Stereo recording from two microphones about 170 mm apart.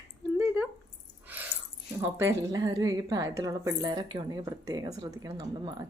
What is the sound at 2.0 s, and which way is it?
A woman's voice, 20° right (ahead or behind).